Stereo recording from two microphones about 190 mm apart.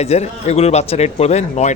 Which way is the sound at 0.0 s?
35° left (ahead or behind).